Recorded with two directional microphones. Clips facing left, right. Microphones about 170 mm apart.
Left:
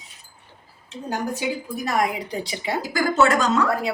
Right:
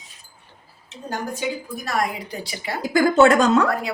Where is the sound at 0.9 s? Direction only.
15° left (ahead or behind).